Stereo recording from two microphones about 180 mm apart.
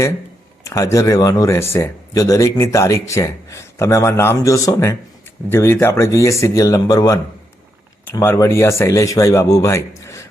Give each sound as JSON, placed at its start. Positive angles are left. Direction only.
{"t": 0.6, "sound": "speech", "side_deg": 15}